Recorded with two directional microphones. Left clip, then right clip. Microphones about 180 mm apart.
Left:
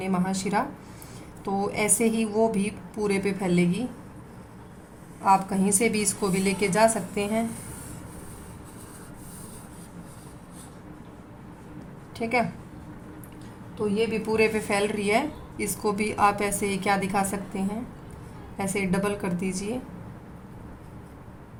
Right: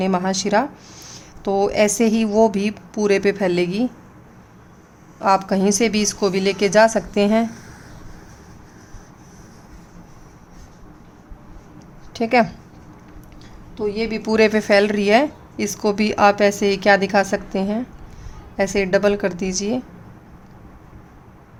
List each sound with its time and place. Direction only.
0.0 s a woman's voice: 50° right (ahead or behind)
5.2 s a woman's voice: 45° right (ahead or behind)
12.1 s a woman's voice: 50° right (ahead or behind)
13.7 s a woman's voice: 60° right (ahead or behind); by 19.8 s 45° right (ahead or behind)